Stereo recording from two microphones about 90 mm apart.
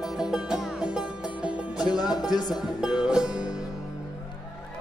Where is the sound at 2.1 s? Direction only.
50° left (ahead or behind).